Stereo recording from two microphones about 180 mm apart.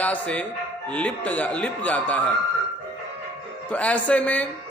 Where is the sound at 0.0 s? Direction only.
10° left (ahead or behind).